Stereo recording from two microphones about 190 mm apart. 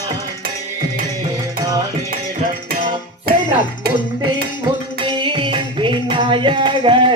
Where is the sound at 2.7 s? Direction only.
50° right (ahead or behind).